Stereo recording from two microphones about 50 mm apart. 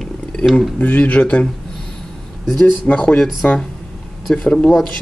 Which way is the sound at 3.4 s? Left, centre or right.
Left.